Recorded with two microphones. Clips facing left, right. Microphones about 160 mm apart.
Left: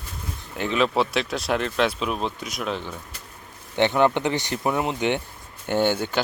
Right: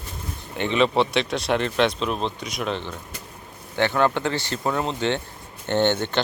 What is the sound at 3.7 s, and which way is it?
Speech, 20° left (ahead or behind).